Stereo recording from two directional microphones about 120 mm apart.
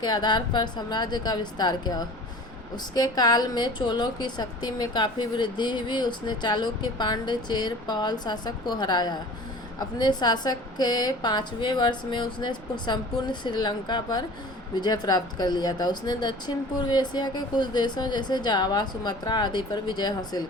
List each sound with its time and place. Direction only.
0.0 s a woman's voice: 35° left (ahead or behind)